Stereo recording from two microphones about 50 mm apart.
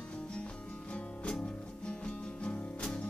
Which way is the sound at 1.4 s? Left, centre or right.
Centre.